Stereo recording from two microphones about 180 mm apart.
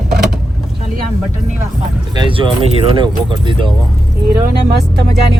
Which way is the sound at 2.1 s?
25° right (ahead or behind).